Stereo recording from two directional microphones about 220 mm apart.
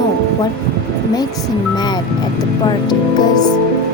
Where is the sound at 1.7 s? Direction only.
20° left (ahead or behind).